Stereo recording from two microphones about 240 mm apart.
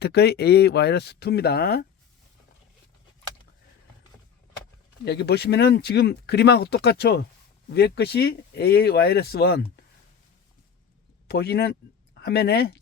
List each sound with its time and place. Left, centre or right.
0.0 s speech: left
5.0 s speech: left
11.3 s speech: left